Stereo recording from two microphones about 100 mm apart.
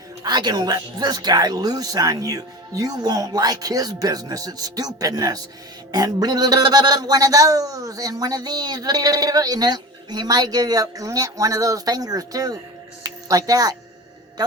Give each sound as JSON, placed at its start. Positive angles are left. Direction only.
{"t": 0.2, "sound": "speech", "side_deg": -45}
{"t": 13.0, "sound": "music", "side_deg": -35}